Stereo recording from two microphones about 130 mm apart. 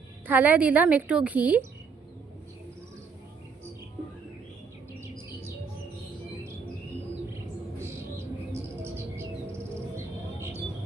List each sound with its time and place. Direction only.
0.3 s a woman's voice: 15° right (ahead or behind)
8.5 s chirp: 20° right (ahead or behind)